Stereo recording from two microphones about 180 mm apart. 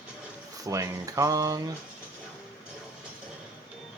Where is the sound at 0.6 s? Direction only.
20° right (ahead or behind).